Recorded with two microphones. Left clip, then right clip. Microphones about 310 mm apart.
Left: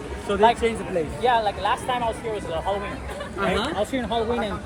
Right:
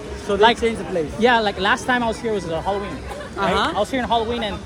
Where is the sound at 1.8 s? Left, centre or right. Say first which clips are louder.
Right 4 dB; right.